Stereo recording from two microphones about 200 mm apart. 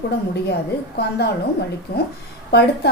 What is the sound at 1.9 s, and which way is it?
Speech, 50° left (ahead or behind).